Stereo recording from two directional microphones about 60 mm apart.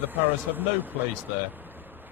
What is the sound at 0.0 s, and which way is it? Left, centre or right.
Speech, right.